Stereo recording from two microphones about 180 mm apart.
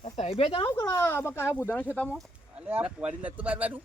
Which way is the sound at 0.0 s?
35° left (ahead or behind).